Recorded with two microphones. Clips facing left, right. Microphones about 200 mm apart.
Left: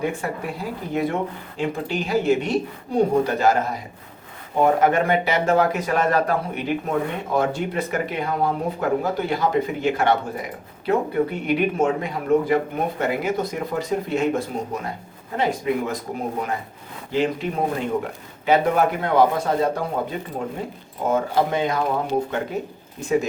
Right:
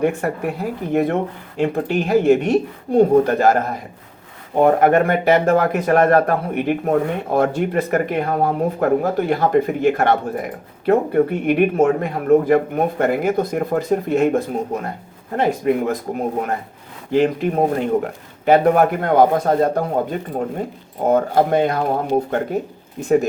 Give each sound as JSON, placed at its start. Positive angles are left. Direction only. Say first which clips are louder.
{"t": 0.0, "sound": "speech", "louder": "right 6 dB", "side_deg": -60}
{"t": 17.1, "sound": "speech", "louder": "right 6 dB", "side_deg": -55}
{"t": 23.0, "sound": "speech", "louder": "right 5 dB", "side_deg": -55}